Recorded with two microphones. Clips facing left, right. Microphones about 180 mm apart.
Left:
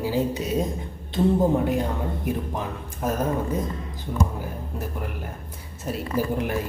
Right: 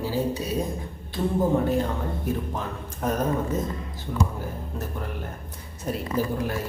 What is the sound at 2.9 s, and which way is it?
Speech, 5° left (ahead or behind).